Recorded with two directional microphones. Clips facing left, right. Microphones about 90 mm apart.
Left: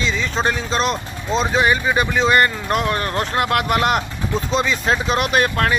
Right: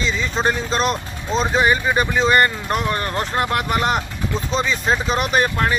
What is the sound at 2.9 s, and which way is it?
Speech, 25° right (ahead or behind).